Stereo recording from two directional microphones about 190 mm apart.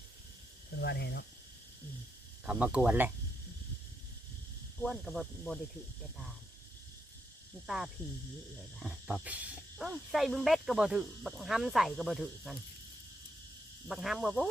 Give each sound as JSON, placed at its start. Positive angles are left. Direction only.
{"t": 0.8, "sound": "speech", "side_deg": 60}
{"t": 2.5, "sound": "speech", "side_deg": -5}
{"t": 4.8, "sound": "speech", "side_deg": 0}
{"t": 8.8, "sound": "speech", "side_deg": 0}
{"t": 13.8, "sound": "speech", "side_deg": 0}